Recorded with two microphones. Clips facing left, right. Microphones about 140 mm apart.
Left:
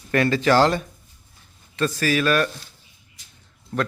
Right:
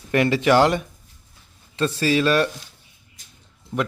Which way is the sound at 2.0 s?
25° right (ahead or behind).